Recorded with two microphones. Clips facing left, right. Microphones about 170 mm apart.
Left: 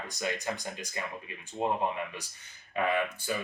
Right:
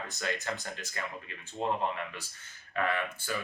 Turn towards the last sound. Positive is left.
turn(degrees=15)  # may be behind; listen again after turning